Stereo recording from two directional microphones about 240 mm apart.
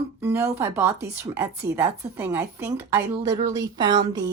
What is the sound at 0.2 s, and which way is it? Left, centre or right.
A woman's voice, centre.